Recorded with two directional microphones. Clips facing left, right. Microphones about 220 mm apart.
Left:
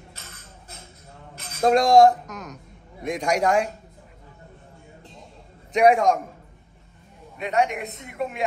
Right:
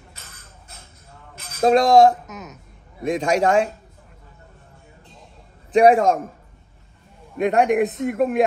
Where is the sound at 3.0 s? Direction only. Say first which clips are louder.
Right 3 dB; 25° right (ahead or behind).